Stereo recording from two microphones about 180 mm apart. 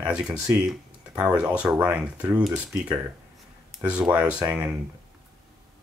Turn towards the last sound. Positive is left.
turn(degrees=-10)  # may be behind; listen again after turning